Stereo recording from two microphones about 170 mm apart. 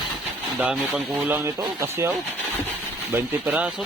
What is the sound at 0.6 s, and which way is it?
Speech, 5° right (ahead or behind).